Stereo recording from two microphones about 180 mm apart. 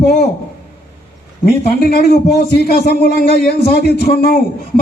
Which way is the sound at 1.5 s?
55° left (ahead or behind).